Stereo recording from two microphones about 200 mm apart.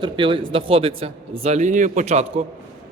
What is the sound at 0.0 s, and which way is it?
Speech, 25° right (ahead or behind).